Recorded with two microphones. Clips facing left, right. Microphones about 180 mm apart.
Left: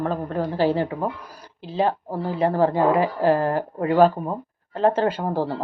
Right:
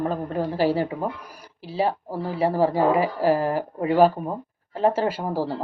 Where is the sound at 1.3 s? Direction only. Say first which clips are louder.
Left 2 dB; 10° right (ahead or behind).